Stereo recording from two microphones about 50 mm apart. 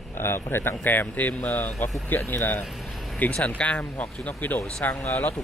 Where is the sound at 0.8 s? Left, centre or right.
Left.